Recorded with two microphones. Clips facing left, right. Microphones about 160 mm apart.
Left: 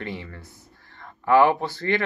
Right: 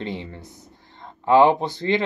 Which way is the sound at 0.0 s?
20° right (ahead or behind).